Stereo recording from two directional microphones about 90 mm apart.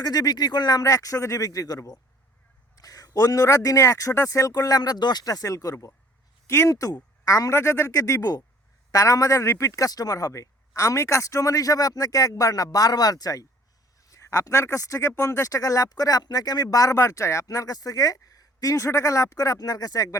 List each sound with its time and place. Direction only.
0.0 s speech: 50° left (ahead or behind)